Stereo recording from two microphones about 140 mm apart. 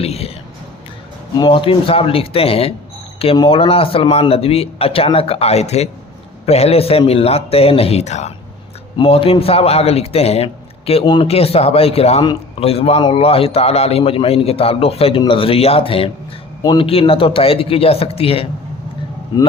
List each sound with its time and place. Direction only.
0.0 s a sound: 45° left (ahead or behind)
1.4 s a man's voice: 35° left (ahead or behind); by 8.3 s 55° left (ahead or behind)
9.0 s a man's voice: 45° left (ahead or behind)
11.0 s speech: 30° left (ahead or behind)
11.3 s a man's voice: 45° left (ahead or behind)